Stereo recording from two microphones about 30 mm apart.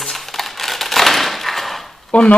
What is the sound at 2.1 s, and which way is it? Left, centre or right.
Speech, left.